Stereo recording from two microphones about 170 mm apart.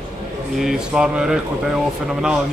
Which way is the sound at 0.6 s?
5° right (ahead or behind).